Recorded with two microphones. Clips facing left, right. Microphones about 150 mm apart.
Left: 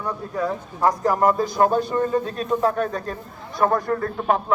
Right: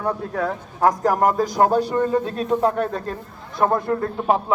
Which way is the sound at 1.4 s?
90° right.